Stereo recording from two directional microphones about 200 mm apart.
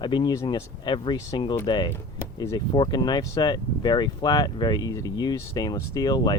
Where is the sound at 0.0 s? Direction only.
20° left (ahead or behind).